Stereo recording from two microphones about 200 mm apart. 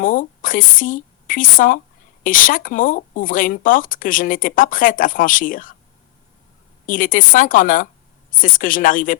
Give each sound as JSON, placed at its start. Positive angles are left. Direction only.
{"t": 0.0, "sound": "a woman's voice", "side_deg": 40}
{"t": 6.8, "sound": "speech", "side_deg": 40}